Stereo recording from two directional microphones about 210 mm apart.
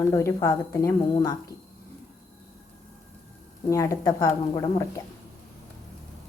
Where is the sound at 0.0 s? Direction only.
15° left (ahead or behind).